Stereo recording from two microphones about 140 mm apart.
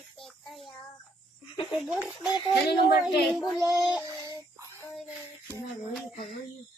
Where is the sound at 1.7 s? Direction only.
Centre (ahead or behind).